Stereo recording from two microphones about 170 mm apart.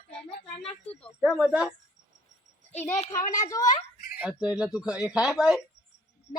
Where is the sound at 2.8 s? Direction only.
15° left (ahead or behind).